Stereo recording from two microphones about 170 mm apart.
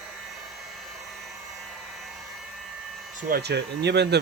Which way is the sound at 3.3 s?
75° right (ahead or behind).